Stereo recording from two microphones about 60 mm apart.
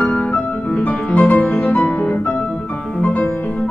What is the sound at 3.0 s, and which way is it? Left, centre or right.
Music, left.